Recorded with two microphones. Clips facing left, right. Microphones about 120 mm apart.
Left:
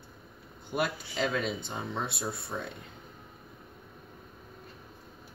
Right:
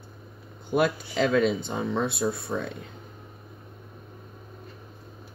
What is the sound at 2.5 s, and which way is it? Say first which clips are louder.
Speech: right 7 dB; 90° right.